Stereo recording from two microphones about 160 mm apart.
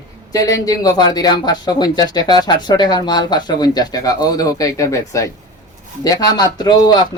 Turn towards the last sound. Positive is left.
turn(degrees=25)  # may be behind; listen again after turning